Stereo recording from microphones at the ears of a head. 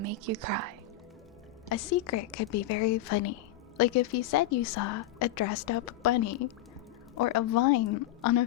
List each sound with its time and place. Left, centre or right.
0.0 s speech: right
1.7 s a woman's voice: left